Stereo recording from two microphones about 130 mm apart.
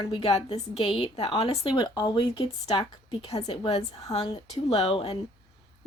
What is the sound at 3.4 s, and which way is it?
A woman's voice, 40° left (ahead or behind).